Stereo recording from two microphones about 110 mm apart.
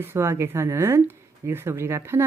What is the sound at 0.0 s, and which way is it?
A woman's voice, 25° right (ahead or behind).